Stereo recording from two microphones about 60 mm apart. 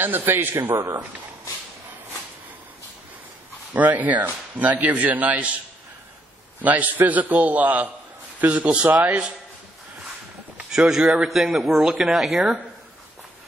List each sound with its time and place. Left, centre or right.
0.0 s a man's voice: right
3.7 s a man's voice: right
6.6 s a man's voice: right
10.6 s a man's voice: centre